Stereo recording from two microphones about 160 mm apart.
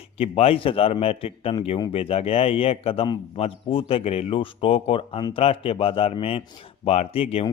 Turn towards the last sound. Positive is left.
turn(degrees=40)  # may be behind; listen again after turning